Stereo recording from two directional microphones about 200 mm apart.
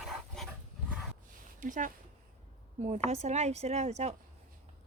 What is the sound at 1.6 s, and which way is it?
Speech, 40° right (ahead or behind).